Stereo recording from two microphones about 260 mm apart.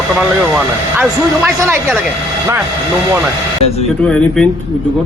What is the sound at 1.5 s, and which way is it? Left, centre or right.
Speech, centre.